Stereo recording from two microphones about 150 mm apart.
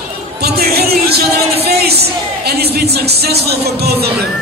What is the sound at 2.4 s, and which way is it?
Music, 90° right.